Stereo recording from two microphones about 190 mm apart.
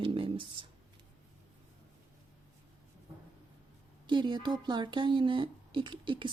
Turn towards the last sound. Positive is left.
turn(degrees=-25)  # may be behind; listen again after turning